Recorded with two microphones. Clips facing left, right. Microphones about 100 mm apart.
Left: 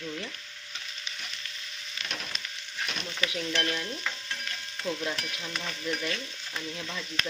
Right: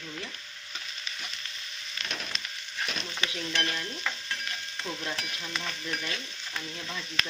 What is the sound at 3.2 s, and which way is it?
Stir, 25° right (ahead or behind).